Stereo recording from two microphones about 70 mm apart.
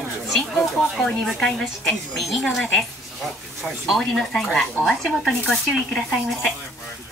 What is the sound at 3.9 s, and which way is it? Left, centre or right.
Speech, centre.